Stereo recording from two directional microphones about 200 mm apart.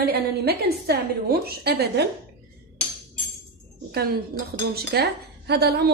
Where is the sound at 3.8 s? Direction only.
50° right (ahead or behind).